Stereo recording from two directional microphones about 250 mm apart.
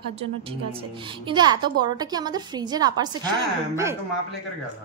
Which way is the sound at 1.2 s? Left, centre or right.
Centre.